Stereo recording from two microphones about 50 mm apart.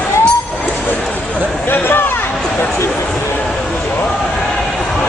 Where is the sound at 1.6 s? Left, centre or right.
Left.